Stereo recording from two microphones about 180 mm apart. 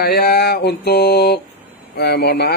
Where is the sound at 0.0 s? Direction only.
60° left (ahead or behind).